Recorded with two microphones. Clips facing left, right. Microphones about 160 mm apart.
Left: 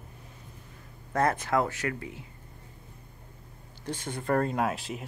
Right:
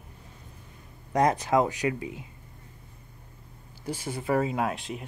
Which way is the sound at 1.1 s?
15° right (ahead or behind).